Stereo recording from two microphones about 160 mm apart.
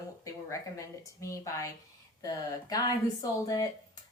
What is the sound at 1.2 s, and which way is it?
A woman's voice, 20° left (ahead or behind).